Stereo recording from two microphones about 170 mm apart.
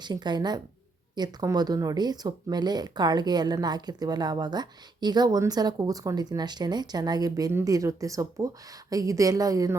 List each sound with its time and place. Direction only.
0.0 s speech: 25° right (ahead or behind)